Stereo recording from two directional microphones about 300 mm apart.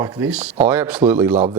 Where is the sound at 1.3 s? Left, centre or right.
Right.